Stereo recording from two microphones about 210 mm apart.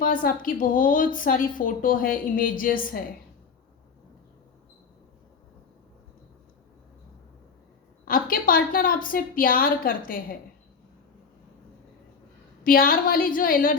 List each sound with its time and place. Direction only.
0.0 s a woman's voice: 40° left (ahead or behind)
8.0 s a woman's voice: 45° left (ahead or behind)
12.6 s a woman's voice: 40° left (ahead or behind)